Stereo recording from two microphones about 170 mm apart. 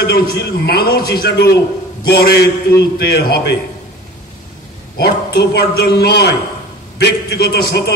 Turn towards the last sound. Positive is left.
turn(degrees=70)  # may be behind; listen again after turning